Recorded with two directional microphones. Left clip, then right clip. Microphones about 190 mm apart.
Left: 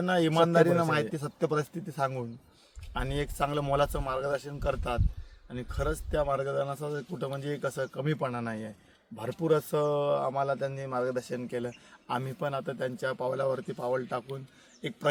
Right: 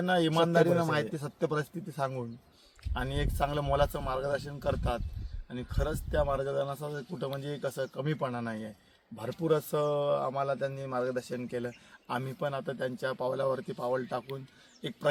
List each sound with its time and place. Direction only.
0.0 s a man's voice: 15° left (ahead or behind)